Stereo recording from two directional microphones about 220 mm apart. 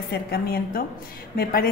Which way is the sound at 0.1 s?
45° left (ahead or behind).